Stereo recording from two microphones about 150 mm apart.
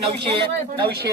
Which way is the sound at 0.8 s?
90° right.